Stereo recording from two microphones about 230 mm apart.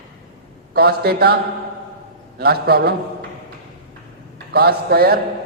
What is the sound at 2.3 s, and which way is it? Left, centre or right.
Mantra, right.